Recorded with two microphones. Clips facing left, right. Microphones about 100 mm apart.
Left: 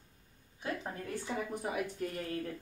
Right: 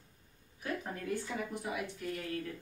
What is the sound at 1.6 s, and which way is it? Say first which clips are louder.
Speech: left 2 dB; 45° left (ahead or behind).